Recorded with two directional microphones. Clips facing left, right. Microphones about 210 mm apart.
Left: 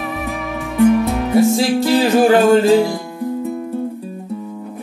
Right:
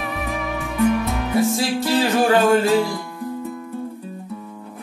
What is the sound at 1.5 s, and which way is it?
Music, 25° left (ahead or behind).